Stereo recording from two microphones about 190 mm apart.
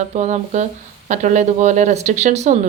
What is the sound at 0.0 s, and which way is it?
Speech, 35° right (ahead or behind).